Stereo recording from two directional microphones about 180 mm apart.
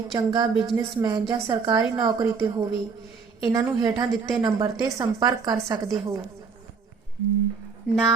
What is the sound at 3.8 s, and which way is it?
A woman's voice, 20° right (ahead or behind).